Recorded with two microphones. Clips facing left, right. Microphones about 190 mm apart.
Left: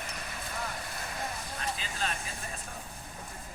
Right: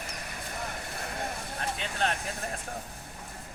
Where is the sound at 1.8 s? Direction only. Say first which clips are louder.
Right 5 dB; 70° right (ahead or behind).